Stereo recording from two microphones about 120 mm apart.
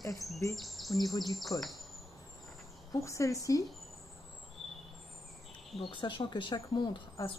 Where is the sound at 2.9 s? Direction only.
25° left (ahead or behind).